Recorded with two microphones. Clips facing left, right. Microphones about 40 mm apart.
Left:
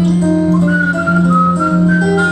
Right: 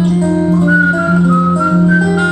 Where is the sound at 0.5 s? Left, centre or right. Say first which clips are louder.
Right 2 dB; centre.